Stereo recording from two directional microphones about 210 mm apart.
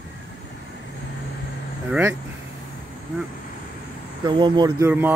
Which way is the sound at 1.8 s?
5° right (ahead or behind).